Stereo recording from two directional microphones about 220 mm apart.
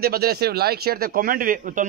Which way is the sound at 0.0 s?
45° right (ahead or behind).